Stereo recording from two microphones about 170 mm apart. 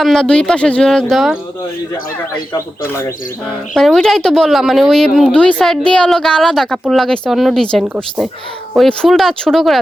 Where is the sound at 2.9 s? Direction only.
15° left (ahead or behind).